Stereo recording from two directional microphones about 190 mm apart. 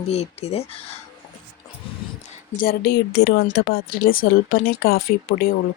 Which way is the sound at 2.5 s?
55° left (ahead or behind).